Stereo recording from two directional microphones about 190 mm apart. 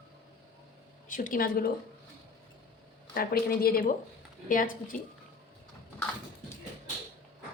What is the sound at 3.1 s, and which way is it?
Speech, 50° left (ahead or behind).